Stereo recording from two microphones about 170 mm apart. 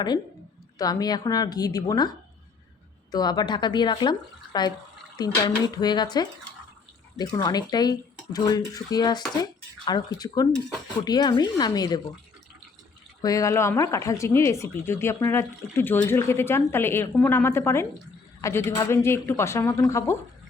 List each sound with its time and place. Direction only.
0.8 s speech: 20° left (ahead or behind)
13.2 s speech: 20° left (ahead or behind)